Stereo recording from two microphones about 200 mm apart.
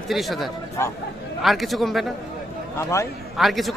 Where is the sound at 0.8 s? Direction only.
15° left (ahead or behind).